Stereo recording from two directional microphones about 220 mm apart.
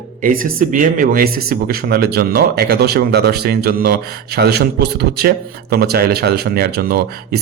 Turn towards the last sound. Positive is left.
turn(degrees=-45)  # may be behind; listen again after turning